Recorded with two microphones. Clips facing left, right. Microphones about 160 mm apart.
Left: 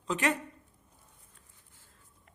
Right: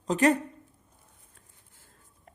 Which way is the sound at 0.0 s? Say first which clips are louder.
Right 7 dB; 40° right (ahead or behind).